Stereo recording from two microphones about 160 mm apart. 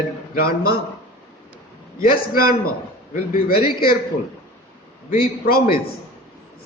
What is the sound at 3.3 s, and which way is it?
Speech, 65° left (ahead or behind).